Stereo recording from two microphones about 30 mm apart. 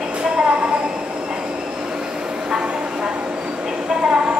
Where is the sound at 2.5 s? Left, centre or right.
Right.